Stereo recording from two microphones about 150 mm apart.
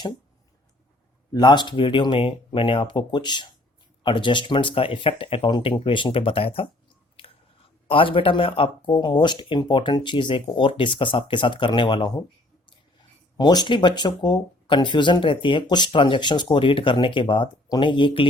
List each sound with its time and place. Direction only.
1.3 s speech: 30° left (ahead or behind)
7.9 s speech: 35° left (ahead or behind)
13.3 s speech: 25° left (ahead or behind)